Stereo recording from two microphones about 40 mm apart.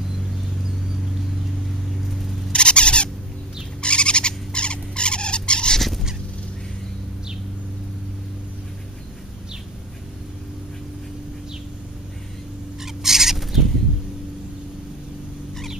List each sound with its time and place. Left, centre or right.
2.5 s a sound: left
3.8 s owl: left
5.8 s fowl: centre
12.8 s owl: centre